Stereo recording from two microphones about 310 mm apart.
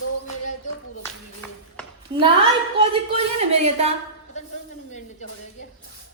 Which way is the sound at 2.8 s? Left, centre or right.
Centre.